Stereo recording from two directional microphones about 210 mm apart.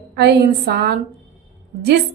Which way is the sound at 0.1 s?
50° right (ahead or behind).